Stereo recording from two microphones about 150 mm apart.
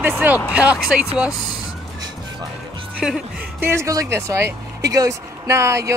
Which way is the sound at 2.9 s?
5° right (ahead or behind).